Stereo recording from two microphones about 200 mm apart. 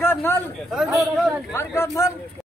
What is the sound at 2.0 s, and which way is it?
Speech, 15° left (ahead or behind).